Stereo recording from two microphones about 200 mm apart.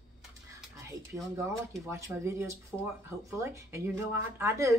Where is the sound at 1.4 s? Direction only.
15° right (ahead or behind).